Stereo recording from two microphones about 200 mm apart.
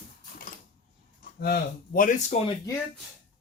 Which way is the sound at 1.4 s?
45° left (ahead or behind).